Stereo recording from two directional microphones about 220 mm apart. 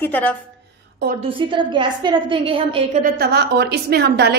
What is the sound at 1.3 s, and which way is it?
A woman's voice, 20° right (ahead or behind).